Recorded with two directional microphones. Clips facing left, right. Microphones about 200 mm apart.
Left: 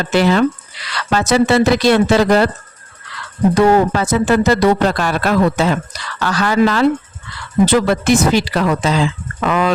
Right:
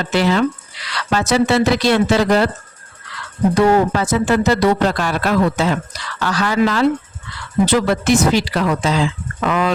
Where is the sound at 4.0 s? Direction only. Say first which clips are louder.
Left 2 dB; 55° left (ahead or behind).